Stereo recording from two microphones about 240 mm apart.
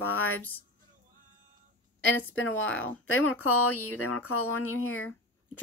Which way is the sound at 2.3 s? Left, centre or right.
Left.